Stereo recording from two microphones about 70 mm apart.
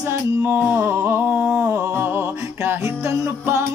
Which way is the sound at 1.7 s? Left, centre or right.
Right.